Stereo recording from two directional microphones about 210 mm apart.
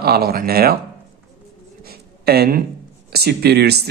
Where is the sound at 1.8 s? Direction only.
50° right (ahead or behind).